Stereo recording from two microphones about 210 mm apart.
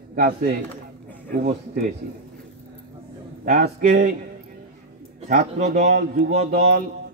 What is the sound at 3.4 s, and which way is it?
Speech, 45° right (ahead or behind).